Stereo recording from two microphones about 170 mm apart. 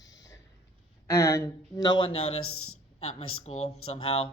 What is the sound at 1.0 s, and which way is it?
Speech, 15° left (ahead or behind).